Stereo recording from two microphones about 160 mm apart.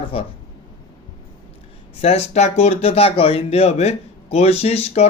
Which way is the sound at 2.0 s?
40° left (ahead or behind).